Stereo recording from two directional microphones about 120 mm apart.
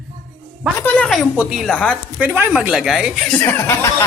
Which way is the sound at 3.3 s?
15° left (ahead or behind).